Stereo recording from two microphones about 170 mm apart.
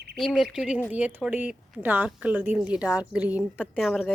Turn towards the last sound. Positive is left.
turn(degrees=0)  # may be behind; listen again after turning